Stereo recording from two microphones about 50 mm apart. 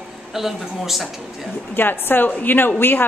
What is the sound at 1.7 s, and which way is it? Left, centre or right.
A woman's voice, left.